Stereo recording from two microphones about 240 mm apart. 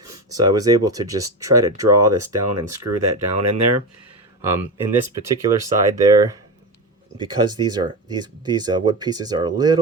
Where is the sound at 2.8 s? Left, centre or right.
Right.